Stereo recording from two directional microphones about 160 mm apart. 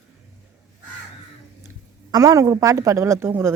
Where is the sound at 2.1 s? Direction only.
20° right (ahead or behind).